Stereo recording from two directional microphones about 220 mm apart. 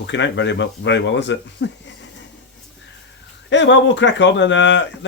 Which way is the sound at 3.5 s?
55° left (ahead or behind).